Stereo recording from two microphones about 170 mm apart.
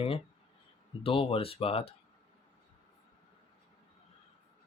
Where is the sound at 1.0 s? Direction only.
35° left (ahead or behind).